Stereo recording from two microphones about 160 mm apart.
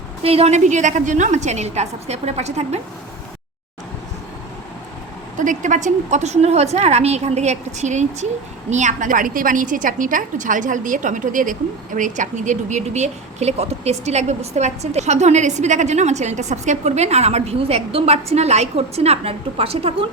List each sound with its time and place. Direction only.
0.2 s a woman's voice: 40° right (ahead or behind)
5.4 s a woman's voice: 50° right (ahead or behind)